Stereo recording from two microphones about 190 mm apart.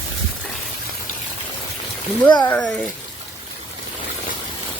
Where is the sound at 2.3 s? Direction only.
20° left (ahead or behind).